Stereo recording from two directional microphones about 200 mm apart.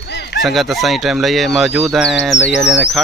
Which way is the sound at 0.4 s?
Centre (ahead or behind).